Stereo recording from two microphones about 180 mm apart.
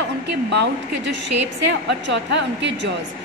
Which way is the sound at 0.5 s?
70° right (ahead or behind).